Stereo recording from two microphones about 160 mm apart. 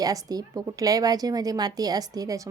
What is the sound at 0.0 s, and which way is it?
Speech, 25° right (ahead or behind).